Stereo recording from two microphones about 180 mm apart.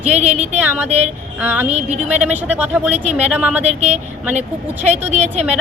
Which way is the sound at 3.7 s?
40° right (ahead or behind).